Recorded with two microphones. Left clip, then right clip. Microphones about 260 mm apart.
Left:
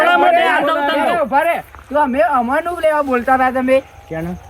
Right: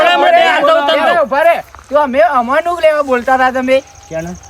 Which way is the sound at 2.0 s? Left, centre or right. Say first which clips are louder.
Right 3 dB; centre.